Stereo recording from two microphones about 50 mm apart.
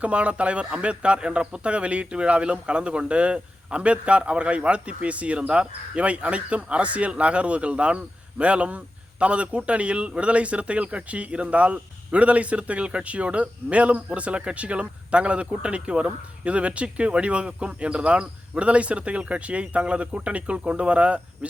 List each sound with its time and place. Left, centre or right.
0.0 s speech: right